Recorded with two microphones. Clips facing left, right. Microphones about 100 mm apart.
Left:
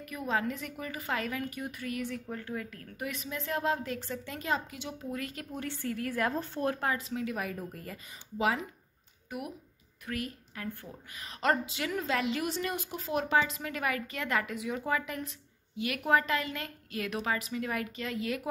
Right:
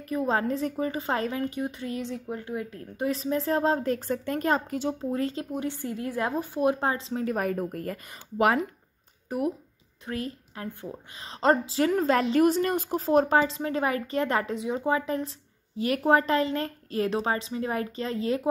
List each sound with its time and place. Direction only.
0.0 s a woman's voice: 30° right (ahead or behind)
5.5 s a woman's voice: 15° right (ahead or behind)
6.9 s speech: 30° right (ahead or behind)
7.2 s a woman's voice: 45° right (ahead or behind)
9.3 s a woman's voice: 35° right (ahead or behind)